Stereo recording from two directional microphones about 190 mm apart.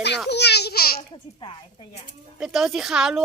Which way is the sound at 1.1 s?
25° left (ahead or behind).